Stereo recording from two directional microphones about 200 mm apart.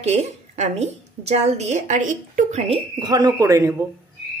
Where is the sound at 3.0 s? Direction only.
20° right (ahead or behind).